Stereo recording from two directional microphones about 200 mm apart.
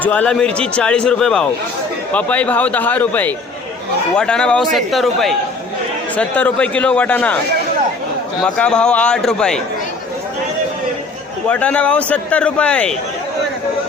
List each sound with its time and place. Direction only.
0.0 s a man's voice: 5° left (ahead or behind)
8.4 s a man's voice: 5° left (ahead or behind)
11.4 s a man's voice: 5° left (ahead or behind)